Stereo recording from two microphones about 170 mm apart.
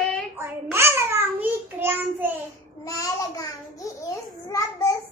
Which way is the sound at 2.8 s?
20° left (ahead or behind).